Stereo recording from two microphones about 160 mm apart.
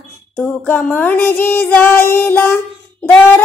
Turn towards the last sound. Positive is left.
turn(degrees=15)  # may be behind; listen again after turning